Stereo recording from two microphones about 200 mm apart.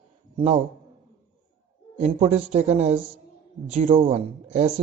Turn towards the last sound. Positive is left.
turn(degrees=-30)  # may be behind; listen again after turning